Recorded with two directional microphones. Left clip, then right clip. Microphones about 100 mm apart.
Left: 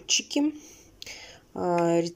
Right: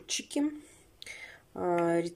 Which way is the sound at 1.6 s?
15° left (ahead or behind).